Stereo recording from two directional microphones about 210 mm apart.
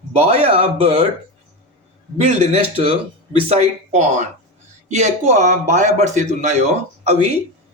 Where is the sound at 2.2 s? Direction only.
30° right (ahead or behind).